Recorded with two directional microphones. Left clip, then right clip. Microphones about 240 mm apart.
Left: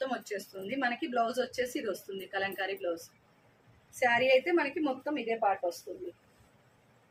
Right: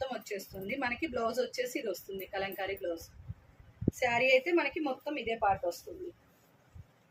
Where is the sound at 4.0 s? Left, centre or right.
Centre.